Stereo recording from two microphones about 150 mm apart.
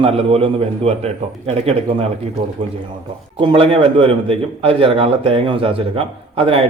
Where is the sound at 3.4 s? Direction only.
35° right (ahead or behind).